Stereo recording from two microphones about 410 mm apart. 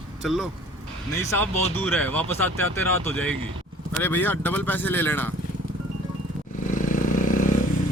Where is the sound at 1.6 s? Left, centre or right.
Centre.